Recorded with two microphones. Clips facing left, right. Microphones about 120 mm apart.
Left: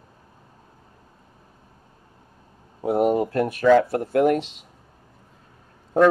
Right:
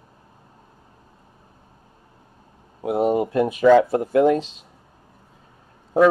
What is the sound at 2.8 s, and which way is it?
Speech, centre (ahead or behind).